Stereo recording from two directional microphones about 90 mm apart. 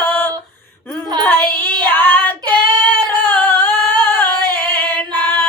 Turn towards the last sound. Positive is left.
turn(degrees=20)  # may be behind; listen again after turning